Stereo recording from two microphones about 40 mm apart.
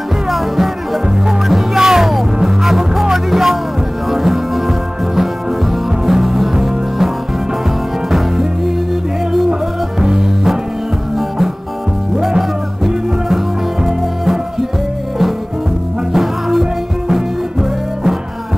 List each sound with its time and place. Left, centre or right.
1.5 s music: centre
8.1 s music: centre
10.0 s music: centre
16.1 s music: centre